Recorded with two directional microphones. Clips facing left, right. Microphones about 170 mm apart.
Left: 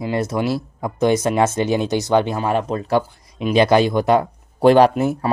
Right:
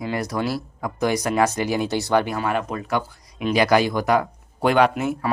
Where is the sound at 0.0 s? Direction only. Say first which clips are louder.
Left 4 dB; 25° left (ahead or behind).